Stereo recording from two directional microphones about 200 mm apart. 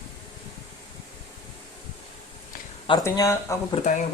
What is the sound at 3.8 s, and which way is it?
Speech, 30° left (ahead or behind).